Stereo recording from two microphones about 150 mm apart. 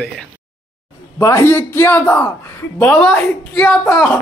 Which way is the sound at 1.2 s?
15° left (ahead or behind).